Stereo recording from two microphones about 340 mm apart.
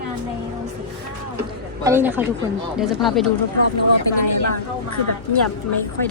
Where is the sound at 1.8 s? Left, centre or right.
Centre.